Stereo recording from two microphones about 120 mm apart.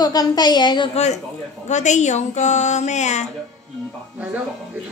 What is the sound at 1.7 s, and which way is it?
Speech, 75° left (ahead or behind).